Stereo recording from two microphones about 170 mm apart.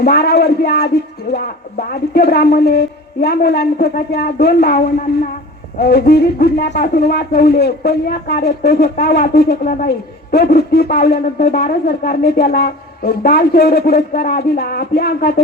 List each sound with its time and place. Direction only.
0.0 s speech: 70° left (ahead or behind)